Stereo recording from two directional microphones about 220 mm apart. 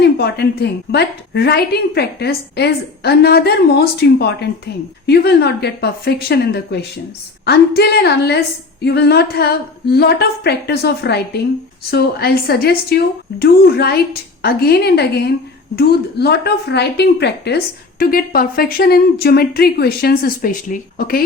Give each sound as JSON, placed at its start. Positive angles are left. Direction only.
{"t": 0.0, "sound": "a woman's voice", "side_deg": 45}